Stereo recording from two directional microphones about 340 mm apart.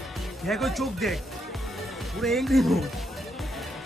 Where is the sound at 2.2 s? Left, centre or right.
Centre.